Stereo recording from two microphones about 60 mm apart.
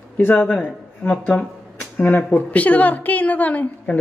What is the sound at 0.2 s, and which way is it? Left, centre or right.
A woman's voice, left.